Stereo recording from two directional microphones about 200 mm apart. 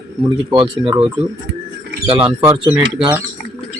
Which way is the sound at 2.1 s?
20° right (ahead or behind).